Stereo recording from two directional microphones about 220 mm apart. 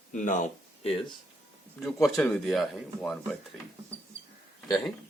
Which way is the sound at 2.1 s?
5° left (ahead or behind).